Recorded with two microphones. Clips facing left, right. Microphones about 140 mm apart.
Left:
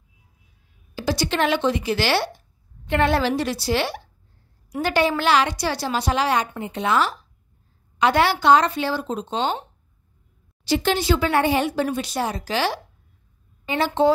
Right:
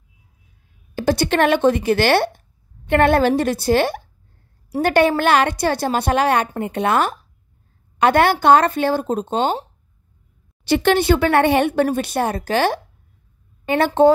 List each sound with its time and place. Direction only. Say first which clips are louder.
0.9 s a woman's voice: right 5 dB; 55° right (ahead or behind)
10.6 s a woman's voice: right 5 dB; 60° right (ahead or behind)